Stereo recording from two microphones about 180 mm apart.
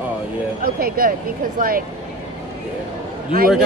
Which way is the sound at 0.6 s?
55° right (ahead or behind).